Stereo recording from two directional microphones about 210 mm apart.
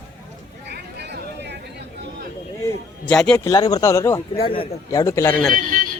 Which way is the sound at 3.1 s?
5° left (ahead or behind).